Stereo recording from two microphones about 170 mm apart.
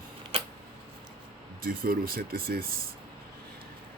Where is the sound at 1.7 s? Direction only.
60° right (ahead or behind).